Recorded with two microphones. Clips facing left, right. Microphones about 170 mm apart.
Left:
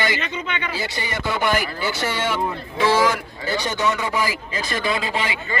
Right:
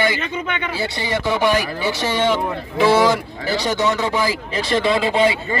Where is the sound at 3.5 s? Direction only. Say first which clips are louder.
Right 4 dB; 75° right (ahead or behind).